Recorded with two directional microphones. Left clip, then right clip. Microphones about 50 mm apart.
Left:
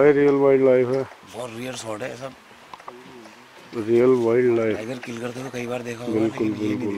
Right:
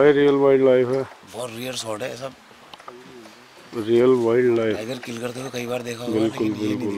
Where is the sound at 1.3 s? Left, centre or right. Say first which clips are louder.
Right 2 dB; centre.